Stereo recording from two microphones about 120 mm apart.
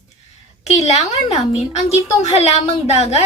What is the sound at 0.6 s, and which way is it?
A woman's voice, 65° left (ahead or behind).